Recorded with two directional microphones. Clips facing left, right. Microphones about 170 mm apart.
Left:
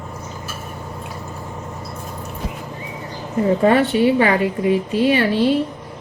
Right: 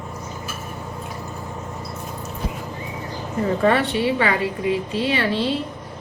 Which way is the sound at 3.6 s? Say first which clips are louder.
Left 4 dB; 40° left (ahead or behind).